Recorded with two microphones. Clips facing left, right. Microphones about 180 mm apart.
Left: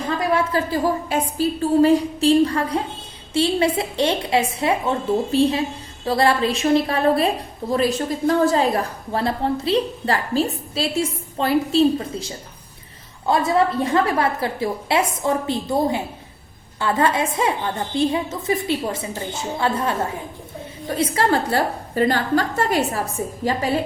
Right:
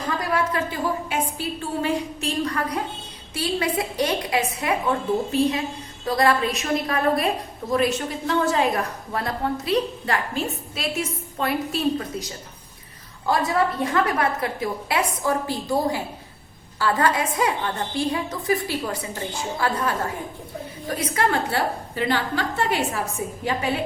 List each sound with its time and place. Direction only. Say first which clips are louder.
0.3 s a woman's voice: left 4 dB; 35° left (ahead or behind)